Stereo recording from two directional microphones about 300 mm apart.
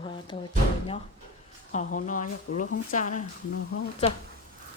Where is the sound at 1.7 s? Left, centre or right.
Left.